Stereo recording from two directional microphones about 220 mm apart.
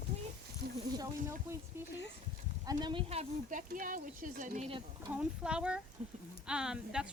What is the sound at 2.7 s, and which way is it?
Speech, 20° right (ahead or behind).